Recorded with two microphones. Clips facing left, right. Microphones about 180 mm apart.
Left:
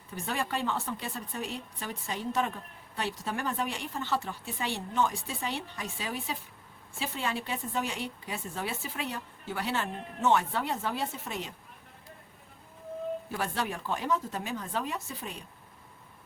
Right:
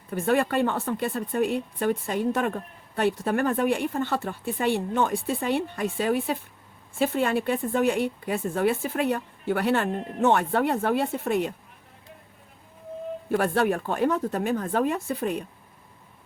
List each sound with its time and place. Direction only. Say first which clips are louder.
0.1 s speech: right 10 dB; 55° right (ahead or behind)
13.3 s speech: right 15 dB; 55° right (ahead or behind)